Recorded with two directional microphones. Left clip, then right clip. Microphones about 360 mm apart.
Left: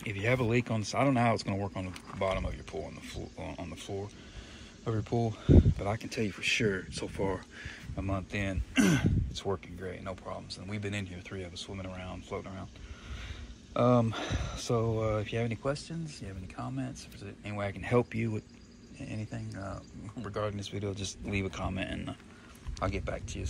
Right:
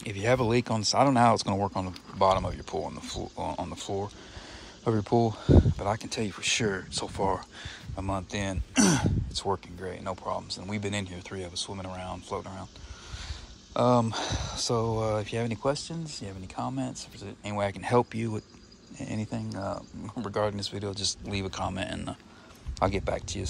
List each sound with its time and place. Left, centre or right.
0.0 s speech: centre
13.7 s speech: centre
19.0 s speech: centre